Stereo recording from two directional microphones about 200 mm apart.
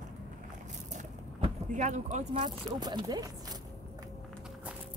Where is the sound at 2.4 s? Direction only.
20° right (ahead or behind).